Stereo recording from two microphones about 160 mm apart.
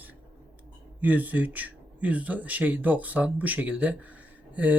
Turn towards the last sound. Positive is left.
turn(degrees=-10)  # may be behind; listen again after turning